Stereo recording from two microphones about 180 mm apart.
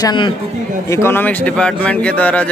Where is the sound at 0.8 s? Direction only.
15° left (ahead or behind).